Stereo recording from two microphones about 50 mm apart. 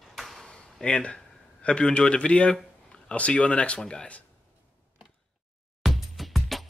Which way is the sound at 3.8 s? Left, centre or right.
Centre.